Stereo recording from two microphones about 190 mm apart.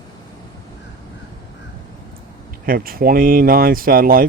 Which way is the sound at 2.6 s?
50° right (ahead or behind).